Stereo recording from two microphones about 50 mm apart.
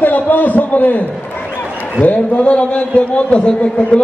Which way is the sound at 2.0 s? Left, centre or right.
Left.